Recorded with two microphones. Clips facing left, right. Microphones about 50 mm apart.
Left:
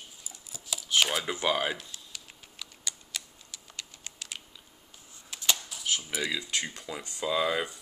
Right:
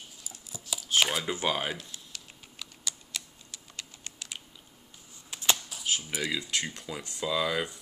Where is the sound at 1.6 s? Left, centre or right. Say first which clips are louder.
Left 3 dB; centre.